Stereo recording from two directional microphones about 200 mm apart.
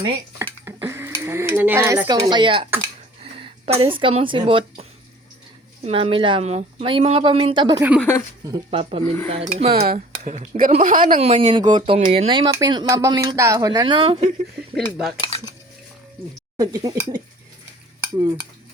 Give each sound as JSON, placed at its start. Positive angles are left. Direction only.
{"t": 0.0, "sound": "a sound", "side_deg": -20}
{"t": 2.1, "sound": "speech", "side_deg": -25}
{"t": 7.8, "sound": "speech", "side_deg": -5}
{"t": 8.7, "sound": "speech", "side_deg": -30}
{"t": 9.7, "sound": "speech", "side_deg": -45}
{"t": 14.8, "sound": "speech", "side_deg": 0}
{"t": 15.2, "sound": "cutlery", "side_deg": 20}
{"t": 16.6, "sound": "speech", "side_deg": -15}